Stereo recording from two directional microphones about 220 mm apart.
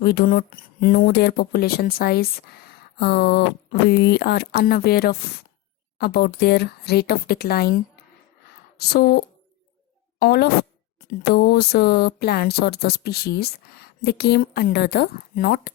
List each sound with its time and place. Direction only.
0.0 s speech: 45° left (ahead or behind)
8.8 s speech: 45° left (ahead or behind)